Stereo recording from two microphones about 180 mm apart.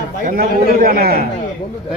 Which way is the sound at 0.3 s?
55° right (ahead or behind).